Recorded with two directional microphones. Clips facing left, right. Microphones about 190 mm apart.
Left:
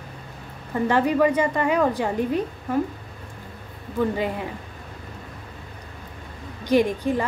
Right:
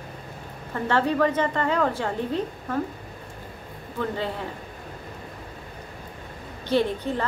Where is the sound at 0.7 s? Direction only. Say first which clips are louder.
Left 3 dB; 15° left (ahead or behind).